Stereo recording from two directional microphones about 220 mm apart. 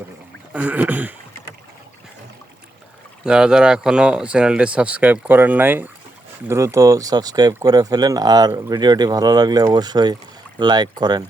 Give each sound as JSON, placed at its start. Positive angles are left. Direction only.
{"t": 0.5, "sound": "speech", "side_deg": -5}
{"t": 3.2, "sound": "speech", "side_deg": -5}